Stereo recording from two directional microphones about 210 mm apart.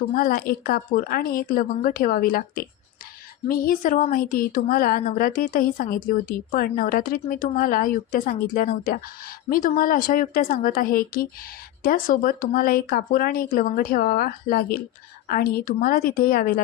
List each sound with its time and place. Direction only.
0.2 s speech: 45° left (ahead or behind)